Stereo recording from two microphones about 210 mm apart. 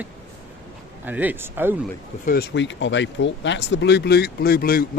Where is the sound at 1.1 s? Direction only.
10° right (ahead or behind).